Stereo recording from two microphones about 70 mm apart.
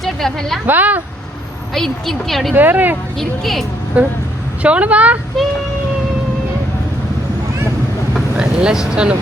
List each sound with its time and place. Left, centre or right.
0.0 s a woman's voice: centre
0.7 s speech: right
1.7 s a woman's voice: centre
2.6 s speech: right
3.2 s a woman's voice: centre
3.9 s speech: right
8.4 s speech: centre